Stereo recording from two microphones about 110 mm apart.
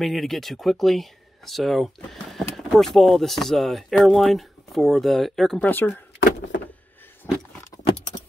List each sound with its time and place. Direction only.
0.0 s speech: centre (ahead or behind)
5.7 s speech: 15° left (ahead or behind)
7.2 s vehicle: 20° left (ahead or behind)